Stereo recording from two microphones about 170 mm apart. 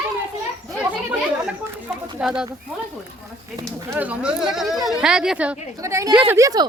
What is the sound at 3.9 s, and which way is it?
A woman's voice, 10° right (ahead or behind).